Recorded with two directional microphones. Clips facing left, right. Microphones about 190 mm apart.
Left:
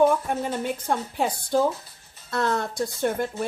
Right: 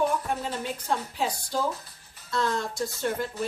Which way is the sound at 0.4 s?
55° left (ahead or behind).